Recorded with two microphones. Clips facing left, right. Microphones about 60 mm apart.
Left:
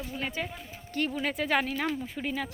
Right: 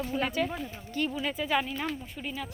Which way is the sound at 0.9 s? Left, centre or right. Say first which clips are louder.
Left 1 dB; left.